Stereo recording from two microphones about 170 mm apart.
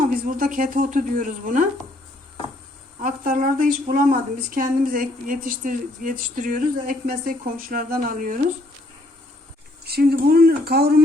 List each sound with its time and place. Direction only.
0.0 s a woman's voice: 55° right (ahead or behind)
3.0 s a woman's voice: 50° right (ahead or behind)
9.8 s speech: 65° right (ahead or behind)